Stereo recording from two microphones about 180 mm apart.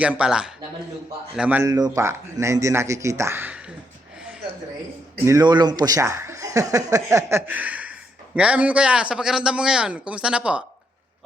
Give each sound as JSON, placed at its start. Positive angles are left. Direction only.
{"t": 0.0, "sound": "a man's voice", "side_deg": -5}
{"t": 5.2, "sound": "a man's voice", "side_deg": -20}